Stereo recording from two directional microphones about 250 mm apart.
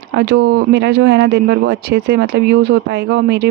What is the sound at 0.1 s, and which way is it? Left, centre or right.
Speech, right.